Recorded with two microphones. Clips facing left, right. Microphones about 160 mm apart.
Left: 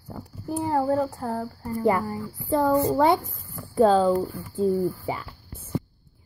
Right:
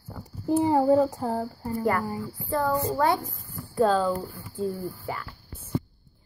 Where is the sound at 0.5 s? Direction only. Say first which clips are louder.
Right 4 dB; 15° right (ahead or behind).